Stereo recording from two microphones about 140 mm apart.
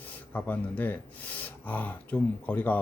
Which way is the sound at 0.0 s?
10° left (ahead or behind).